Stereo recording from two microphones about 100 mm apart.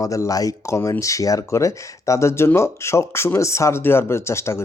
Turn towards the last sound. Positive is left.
turn(degrees=25)  # may be behind; listen again after turning